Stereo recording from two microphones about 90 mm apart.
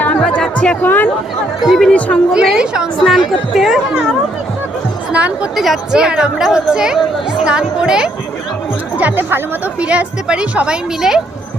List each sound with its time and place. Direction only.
0.0 s music: 10° left (ahead or behind)
0.8 s speech: 20° left (ahead or behind)
1.6 s speech: 5° right (ahead or behind)
1.9 s a woman's voice: 15° left (ahead or behind)
2.3 s speech: 10° right (ahead or behind)
5.1 s speech: 15° right (ahead or behind)
5.5 s speech: 5° right (ahead or behind)